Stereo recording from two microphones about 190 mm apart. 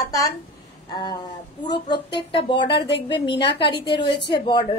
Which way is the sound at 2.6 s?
65° left (ahead or behind).